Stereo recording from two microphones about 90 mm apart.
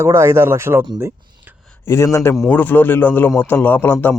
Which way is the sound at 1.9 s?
30° left (ahead or behind).